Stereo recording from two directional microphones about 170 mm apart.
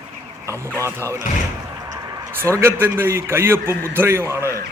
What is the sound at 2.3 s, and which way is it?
A man's voice, 15° right (ahead or behind).